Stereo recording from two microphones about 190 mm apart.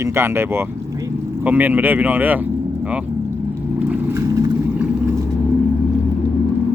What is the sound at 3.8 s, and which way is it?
Vehicle, 10° right (ahead or behind).